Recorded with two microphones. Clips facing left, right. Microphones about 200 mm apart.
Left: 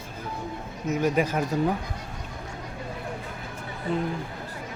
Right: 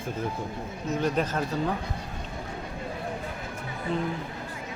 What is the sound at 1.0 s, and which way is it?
Speech, 10° left (ahead or behind).